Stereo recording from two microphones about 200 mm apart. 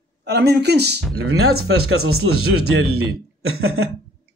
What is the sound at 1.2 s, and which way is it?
Speech, 90° right.